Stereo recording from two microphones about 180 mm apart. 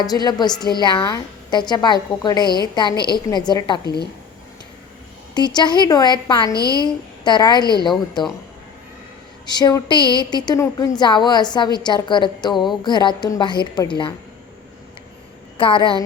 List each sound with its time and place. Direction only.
0.0 s a woman's voice: 20° left (ahead or behind)
5.3 s a woman's voice: 25° left (ahead or behind)
6.5 s a woman's voice: 20° right (ahead or behind)
6.8 s a woman's voice: 25° left (ahead or behind)
9.5 s a woman's voice: 20° left (ahead or behind)
15.5 s a woman's voice: 30° left (ahead or behind)